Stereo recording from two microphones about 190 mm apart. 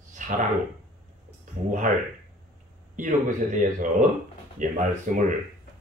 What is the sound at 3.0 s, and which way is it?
Speech, 45° right (ahead or behind).